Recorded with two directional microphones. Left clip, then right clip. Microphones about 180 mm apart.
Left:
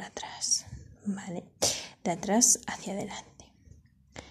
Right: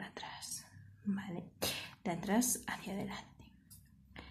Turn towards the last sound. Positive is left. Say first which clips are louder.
# left 6 dB
turn(degrees=45)  # may be behind; listen again after turning